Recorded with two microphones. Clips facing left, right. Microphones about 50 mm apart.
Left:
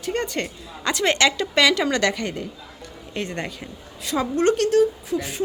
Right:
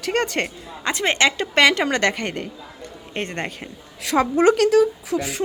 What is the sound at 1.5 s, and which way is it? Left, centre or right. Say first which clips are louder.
A woman's voice: right 2 dB; right.